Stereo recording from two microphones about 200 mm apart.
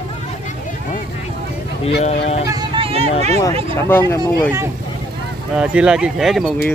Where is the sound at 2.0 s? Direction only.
35° left (ahead or behind).